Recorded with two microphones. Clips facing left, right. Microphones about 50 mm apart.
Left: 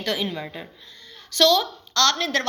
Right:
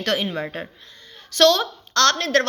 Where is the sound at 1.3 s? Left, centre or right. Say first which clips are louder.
Right 2 dB; right.